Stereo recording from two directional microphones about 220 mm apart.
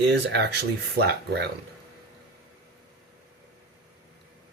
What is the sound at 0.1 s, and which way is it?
Speech, 50° right (ahead or behind).